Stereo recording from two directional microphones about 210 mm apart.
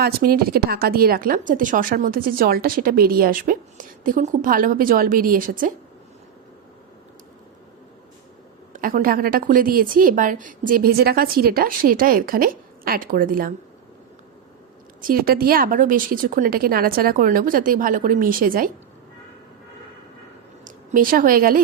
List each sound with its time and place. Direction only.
0.0 s speech: 45° right (ahead or behind)
8.7 s speech: 40° right (ahead or behind)
15.0 s a woman's voice: 45° right (ahead or behind)
20.7 s a woman's voice: 40° right (ahead or behind)